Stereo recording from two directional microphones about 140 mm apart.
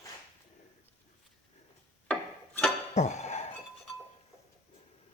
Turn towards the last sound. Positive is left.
turn(degrees=55)  # may be behind; listen again after turning